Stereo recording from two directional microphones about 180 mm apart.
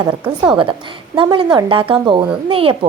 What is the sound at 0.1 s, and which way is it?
A woman's voice, 20° right (ahead or behind).